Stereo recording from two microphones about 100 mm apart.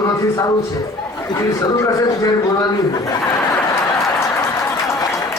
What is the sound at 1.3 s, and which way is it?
A man's voice, 35° left (ahead or behind).